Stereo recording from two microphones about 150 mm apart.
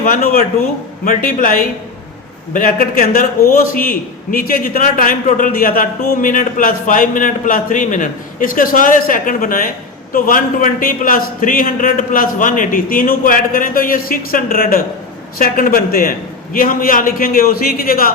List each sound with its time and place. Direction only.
0.0 s a man's voice: 70° left (ahead or behind)